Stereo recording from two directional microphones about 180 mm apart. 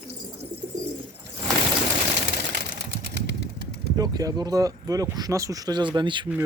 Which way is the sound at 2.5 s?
60° right (ahead or behind).